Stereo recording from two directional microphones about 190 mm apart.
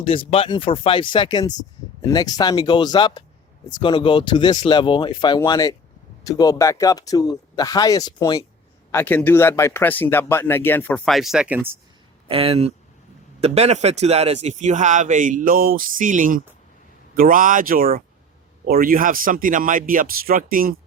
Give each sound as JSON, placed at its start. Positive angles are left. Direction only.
{"t": 0.0, "sound": "speech", "side_deg": 30}
{"t": 12.3, "sound": "speech", "side_deg": -30}